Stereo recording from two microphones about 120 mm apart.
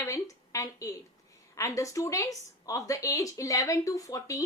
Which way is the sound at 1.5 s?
25° left (ahead or behind).